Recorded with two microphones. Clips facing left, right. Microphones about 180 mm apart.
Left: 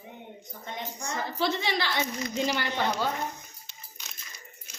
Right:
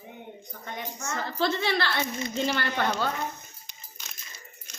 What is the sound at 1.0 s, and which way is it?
A woman's voice, 15° left (ahead or behind).